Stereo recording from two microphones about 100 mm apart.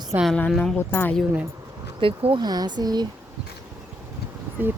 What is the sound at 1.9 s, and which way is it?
Speech, 60° right (ahead or behind).